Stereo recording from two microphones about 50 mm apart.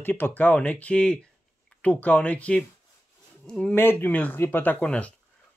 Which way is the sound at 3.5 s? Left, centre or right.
Centre.